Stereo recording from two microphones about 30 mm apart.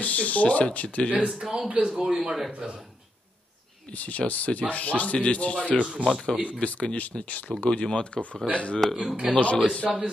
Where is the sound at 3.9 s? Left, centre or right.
Left.